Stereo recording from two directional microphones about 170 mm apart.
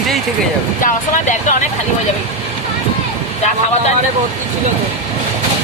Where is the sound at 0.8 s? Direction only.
45° left (ahead or behind).